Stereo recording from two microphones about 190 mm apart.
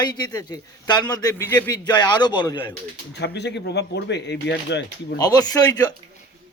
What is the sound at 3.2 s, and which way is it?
Speech, 65° left (ahead or behind).